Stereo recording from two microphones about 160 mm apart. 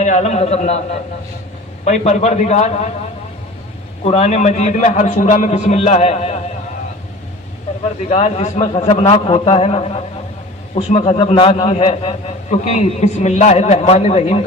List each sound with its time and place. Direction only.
0.0 s a man's voice: 45° left (ahead or behind)
1.8 s a man's voice: 45° left (ahead or behind)
4.0 s a man's voice: 40° left (ahead or behind)
8.1 s a man's voice: 45° left (ahead or behind)